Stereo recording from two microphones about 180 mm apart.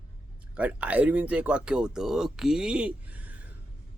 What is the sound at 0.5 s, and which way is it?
Speech, 5° right (ahead or behind).